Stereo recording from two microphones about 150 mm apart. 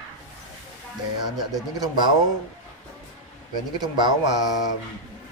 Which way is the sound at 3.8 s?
30° right (ahead or behind).